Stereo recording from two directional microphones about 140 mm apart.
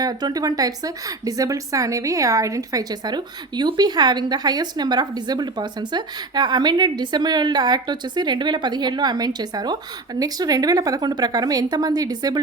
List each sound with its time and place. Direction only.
0.0 s a woman's voice: 30° right (ahead or behind)